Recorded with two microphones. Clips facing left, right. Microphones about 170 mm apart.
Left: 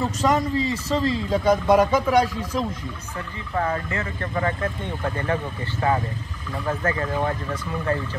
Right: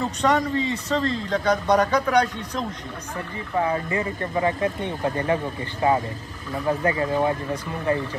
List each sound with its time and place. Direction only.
0.0 s a man's voice: centre (ahead or behind)
3.5 s speech: 15° right (ahead or behind)